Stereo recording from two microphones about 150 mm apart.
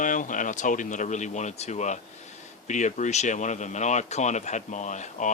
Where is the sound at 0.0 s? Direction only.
60° left (ahead or behind).